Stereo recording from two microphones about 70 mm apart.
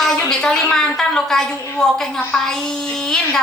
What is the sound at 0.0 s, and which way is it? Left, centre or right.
A woman's voice, centre.